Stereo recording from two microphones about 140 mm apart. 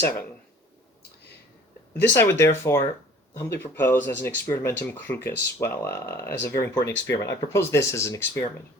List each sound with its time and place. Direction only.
1.9 s speech: 15° left (ahead or behind)